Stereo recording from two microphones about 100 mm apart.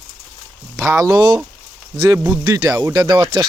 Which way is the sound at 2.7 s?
40° right (ahead or behind).